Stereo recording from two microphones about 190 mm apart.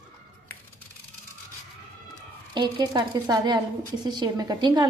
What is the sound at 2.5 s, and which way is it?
A woman's voice, 20° right (ahead or behind).